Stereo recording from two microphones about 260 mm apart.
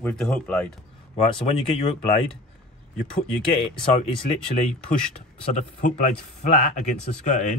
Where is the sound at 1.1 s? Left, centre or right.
Left.